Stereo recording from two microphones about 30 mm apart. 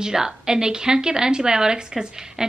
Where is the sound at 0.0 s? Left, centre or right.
Right.